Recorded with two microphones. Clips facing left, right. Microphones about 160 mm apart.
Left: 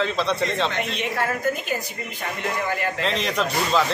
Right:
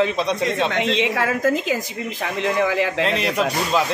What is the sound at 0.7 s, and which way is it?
A woman's voice, 90° right.